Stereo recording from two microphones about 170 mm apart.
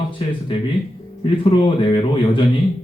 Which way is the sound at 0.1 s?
30° left (ahead or behind).